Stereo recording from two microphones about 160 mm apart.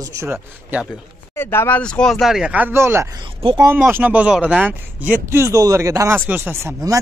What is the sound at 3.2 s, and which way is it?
Speech, 35° right (ahead or behind).